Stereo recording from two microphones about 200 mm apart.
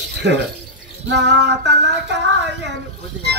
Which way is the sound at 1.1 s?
60° right (ahead or behind).